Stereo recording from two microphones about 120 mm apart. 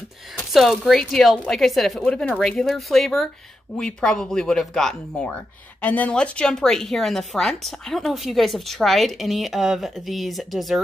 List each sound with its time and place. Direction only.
0.5 s speech: centre (ahead or behind)